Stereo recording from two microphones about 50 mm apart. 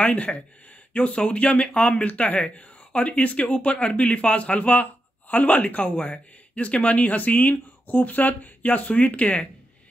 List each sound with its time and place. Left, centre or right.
0.0 s speech: left